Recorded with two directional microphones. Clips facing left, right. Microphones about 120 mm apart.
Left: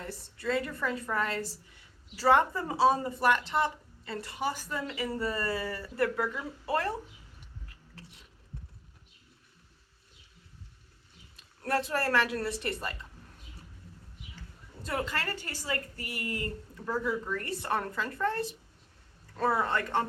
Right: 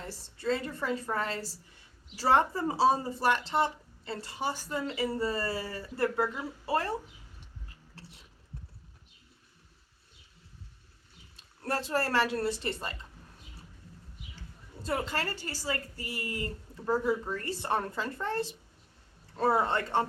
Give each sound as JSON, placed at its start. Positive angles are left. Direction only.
{"t": 0.1, "sound": "speech", "side_deg": -30}
{"t": 11.3, "sound": "a woman's voice", "side_deg": -25}
{"t": 14.8, "sound": "speech", "side_deg": -30}